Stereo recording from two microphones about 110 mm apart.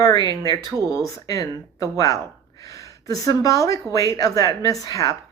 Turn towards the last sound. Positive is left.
turn(degrees=30)  # may be behind; listen again after turning